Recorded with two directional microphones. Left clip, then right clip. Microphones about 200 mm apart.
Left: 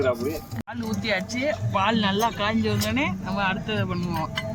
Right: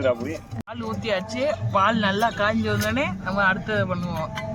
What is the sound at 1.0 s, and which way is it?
Speech, 35° right (ahead or behind).